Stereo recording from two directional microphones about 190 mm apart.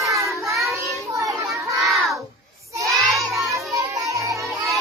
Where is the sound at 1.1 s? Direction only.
15° right (ahead or behind).